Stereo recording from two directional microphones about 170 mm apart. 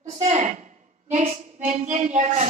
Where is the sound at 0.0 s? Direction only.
40° right (ahead or behind).